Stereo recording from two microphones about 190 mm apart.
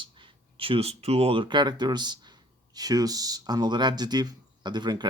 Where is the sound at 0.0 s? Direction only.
25° right (ahead or behind).